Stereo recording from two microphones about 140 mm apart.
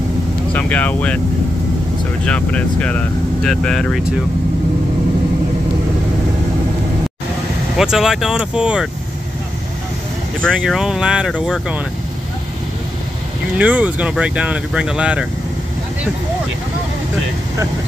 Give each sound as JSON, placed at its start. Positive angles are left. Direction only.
{"t": 0.5, "sound": "speech", "side_deg": 10}
{"t": 2.2, "sound": "speech", "side_deg": 10}
{"t": 7.7, "sound": "speech", "side_deg": -5}
{"t": 10.4, "sound": "speech", "side_deg": 0}
{"t": 13.6, "sound": "speech", "side_deg": -10}